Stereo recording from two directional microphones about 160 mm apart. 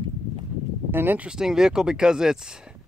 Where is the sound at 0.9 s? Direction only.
10° right (ahead or behind).